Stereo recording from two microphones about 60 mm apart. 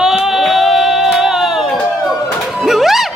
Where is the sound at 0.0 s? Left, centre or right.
Centre.